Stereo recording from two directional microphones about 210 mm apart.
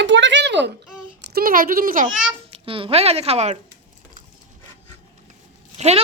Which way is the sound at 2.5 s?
25° right (ahead or behind).